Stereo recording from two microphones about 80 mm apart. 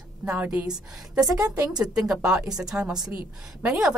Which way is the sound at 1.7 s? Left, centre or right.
Centre.